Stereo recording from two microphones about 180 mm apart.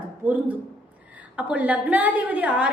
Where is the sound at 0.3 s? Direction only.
10° right (ahead or behind).